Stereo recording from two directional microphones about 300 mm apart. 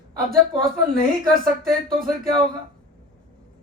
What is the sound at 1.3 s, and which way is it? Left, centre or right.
Speech, right.